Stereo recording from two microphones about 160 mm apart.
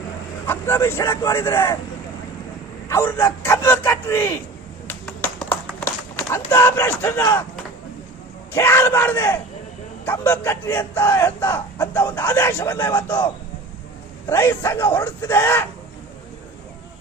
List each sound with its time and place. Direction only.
0.4 s speech: 15° left (ahead or behind)
2.9 s speech: 15° left (ahead or behind)
4.9 s a sound: 5° left (ahead or behind)
8.5 s speech: 15° left (ahead or behind)
12.7 s speech: 25° left (ahead or behind)
14.3 s speech: 20° left (ahead or behind)